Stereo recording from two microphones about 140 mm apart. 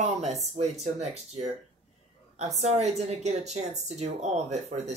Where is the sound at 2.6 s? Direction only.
55° right (ahead or behind).